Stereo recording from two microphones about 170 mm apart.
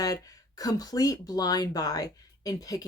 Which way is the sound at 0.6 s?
20° left (ahead or behind).